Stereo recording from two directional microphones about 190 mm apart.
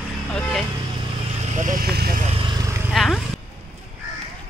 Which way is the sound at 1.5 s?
45° right (ahead or behind).